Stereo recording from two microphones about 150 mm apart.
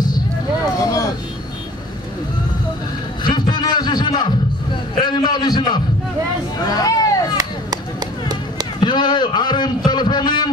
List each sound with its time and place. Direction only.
0.7 s vehicle: 20° left (ahead or behind)
3.3 s a sound: 30° left (ahead or behind)
7.3 s run: 25° right (ahead or behind)
8.7 s a man's voice: 30° left (ahead or behind)